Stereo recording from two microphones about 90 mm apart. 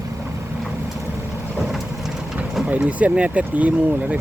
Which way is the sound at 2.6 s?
15° right (ahead or behind).